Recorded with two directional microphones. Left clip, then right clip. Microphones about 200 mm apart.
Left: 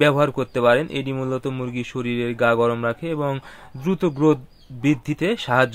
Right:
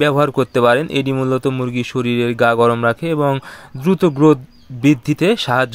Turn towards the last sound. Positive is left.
turn(degrees=-40)  # may be behind; listen again after turning